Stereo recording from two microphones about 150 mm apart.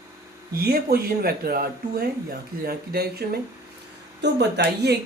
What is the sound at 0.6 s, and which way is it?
Speech, 90° right.